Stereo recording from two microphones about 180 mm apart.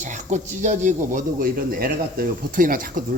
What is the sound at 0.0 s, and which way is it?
Speech, 40° right (ahead or behind).